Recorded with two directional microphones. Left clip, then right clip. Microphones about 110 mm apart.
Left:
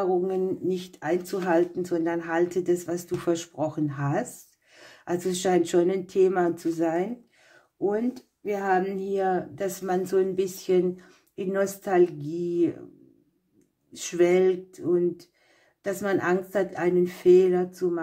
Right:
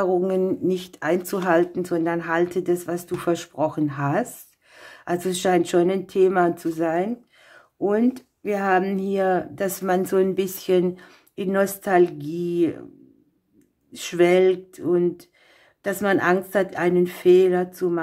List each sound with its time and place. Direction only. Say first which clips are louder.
0.0 s speech: right 4 dB; 70° right (ahead or behind); by 7.6 s 30° right (ahead or behind)
7.8 s speech: right 5 dB; 50° right (ahead or behind); by 12.8 s 25° right (ahead or behind)
13.9 s a woman's voice: right 4 dB; 30° right (ahead or behind)